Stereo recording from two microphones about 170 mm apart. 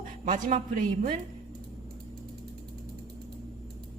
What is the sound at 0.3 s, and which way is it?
Speech, 45° right (ahead or behind).